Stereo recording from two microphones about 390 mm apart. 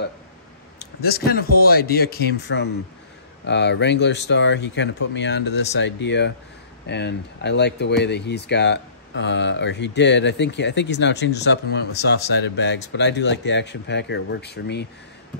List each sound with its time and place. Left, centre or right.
0.7 s speech: left